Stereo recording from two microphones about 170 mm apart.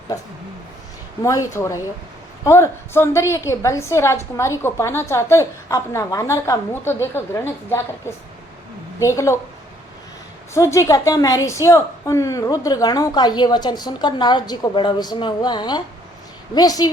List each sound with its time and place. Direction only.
0.1 s a woman's voice: 20° left (ahead or behind)
10.5 s a woman's voice: 15° left (ahead or behind)